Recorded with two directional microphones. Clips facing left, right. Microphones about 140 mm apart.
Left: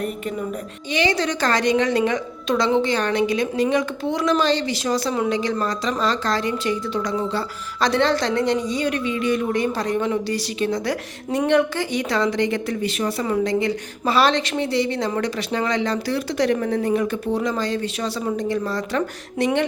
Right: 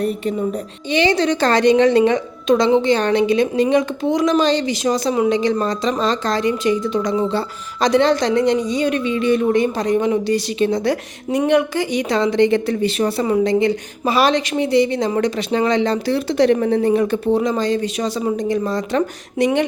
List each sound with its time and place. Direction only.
0.0 s a woman's voice: 35° right (ahead or behind)
11.3 s a woman's voice: 10° right (ahead or behind)